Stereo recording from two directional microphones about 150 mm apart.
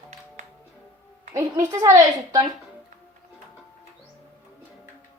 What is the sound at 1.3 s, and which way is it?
A woman's voice, 20° right (ahead or behind).